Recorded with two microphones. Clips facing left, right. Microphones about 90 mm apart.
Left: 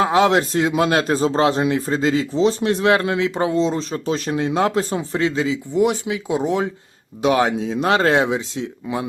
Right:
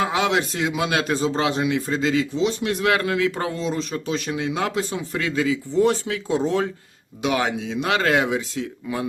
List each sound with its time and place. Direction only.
0.0 s a man's voice: 35° left (ahead or behind); by 6.7 s 15° left (ahead or behind)
7.2 s a man's voice: 35° left (ahead or behind)